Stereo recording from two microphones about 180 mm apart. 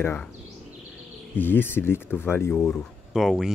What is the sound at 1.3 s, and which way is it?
Speech, 10° left (ahead or behind).